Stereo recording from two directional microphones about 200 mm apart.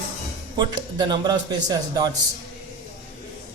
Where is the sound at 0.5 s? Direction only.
20° right (ahead or behind).